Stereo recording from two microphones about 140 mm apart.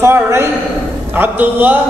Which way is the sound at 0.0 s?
20° right (ahead or behind).